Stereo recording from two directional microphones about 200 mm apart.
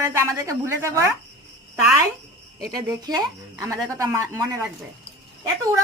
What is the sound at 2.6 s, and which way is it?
Speech, 20° right (ahead or behind).